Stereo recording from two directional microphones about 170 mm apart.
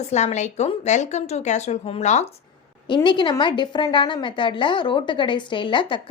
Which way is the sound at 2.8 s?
25° left (ahead or behind).